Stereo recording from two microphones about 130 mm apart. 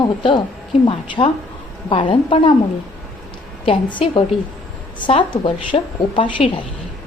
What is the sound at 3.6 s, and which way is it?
A woman's voice, 40° left (ahead or behind).